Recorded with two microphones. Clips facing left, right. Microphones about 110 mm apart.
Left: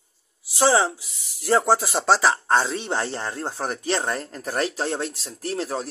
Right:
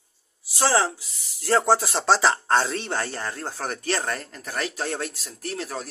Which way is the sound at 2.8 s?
20° left (ahead or behind).